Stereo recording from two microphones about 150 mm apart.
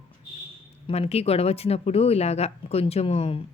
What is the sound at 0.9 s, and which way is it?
Speech, 45° left (ahead or behind).